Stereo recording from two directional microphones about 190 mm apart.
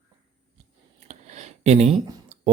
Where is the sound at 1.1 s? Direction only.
35° right (ahead or behind).